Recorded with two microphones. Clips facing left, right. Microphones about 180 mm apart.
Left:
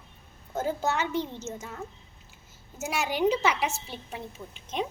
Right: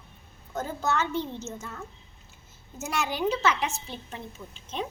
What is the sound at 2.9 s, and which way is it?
A woman's voice, 10° left (ahead or behind).